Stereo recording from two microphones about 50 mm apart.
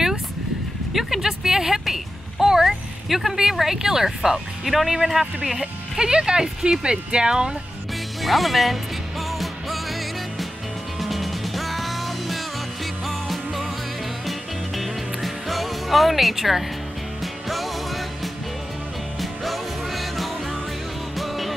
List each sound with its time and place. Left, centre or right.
0.9 s music: centre
5.9 s speech: centre
8.2 s speech: centre
11.0 s music: centre
14.8 s music: centre